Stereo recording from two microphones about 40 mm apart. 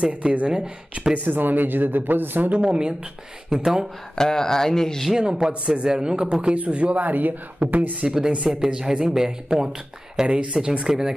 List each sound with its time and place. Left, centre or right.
0.0 s speech: right
1.1 s speech: right
2.6 s speech: right
3.4 s speech: centre
4.1 s speech: centre
5.1 s speech: centre
5.5 s speech: right
6.5 s speech: right
8.0 s speech: centre
10.2 s speech: right
10.9 s speech: centre